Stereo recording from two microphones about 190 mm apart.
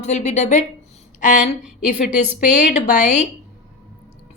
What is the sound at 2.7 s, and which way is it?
Speech, 40° left (ahead or behind).